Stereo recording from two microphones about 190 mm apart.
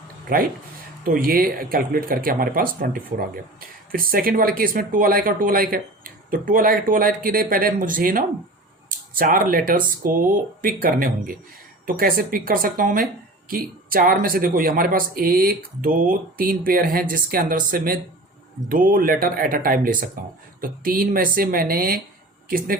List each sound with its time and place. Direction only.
0.3 s speech: 50° right (ahead or behind)